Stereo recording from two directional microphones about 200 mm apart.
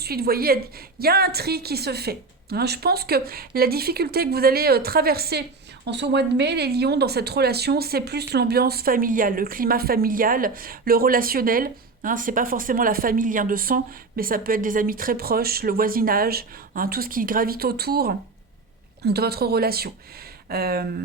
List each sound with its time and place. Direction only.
0.0 s a woman's voice: 50° right (ahead or behind)